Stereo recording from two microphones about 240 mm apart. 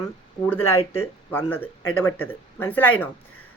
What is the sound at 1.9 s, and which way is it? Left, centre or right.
Speech, left.